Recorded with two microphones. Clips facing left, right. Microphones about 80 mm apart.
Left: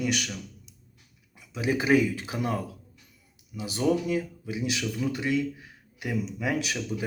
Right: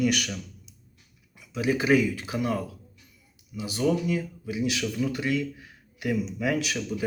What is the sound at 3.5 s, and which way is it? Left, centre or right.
A man's voice, left.